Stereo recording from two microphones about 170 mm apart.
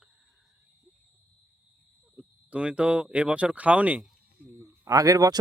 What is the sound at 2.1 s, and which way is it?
Speech, 5° right (ahead or behind).